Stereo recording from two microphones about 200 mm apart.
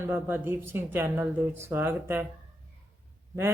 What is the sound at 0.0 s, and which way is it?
Speech, 10° right (ahead or behind).